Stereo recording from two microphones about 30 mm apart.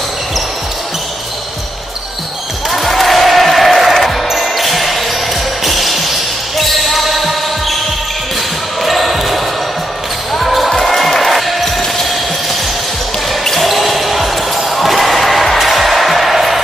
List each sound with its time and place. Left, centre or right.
2.7 s crowd: centre
4.0 s basketball bounce: centre
5.6 s music: centre
6.6 s basketball bounce: centre
8.8 s basketball bounce: centre
10.4 s basketball bounce: centre
13.3 s basketball bounce: centre
15.6 s music: centre